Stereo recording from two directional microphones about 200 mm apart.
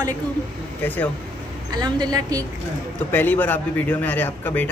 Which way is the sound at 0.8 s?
10° left (ahead or behind).